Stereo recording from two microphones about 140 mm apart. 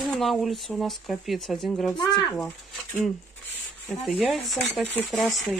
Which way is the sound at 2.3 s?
10° left (ahead or behind).